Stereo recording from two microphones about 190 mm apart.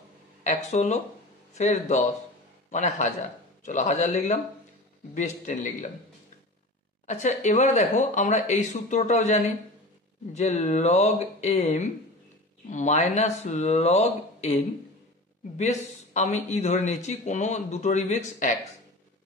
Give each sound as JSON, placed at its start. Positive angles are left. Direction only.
{"t": 0.4, "sound": "a man's voice", "side_deg": 35}
{"t": 7.1, "sound": "a man's voice", "side_deg": 35}